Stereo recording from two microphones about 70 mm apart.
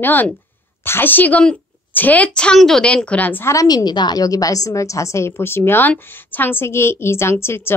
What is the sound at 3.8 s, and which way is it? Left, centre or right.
A woman's voice, left.